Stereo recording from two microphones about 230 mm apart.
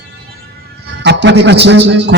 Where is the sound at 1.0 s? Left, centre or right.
Right.